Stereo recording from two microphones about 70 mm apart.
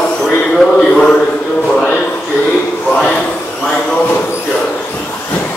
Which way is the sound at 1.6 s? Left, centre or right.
Centre.